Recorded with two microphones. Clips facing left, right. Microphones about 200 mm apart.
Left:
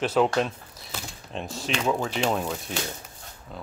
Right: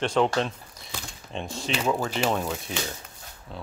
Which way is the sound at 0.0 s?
5° left (ahead or behind).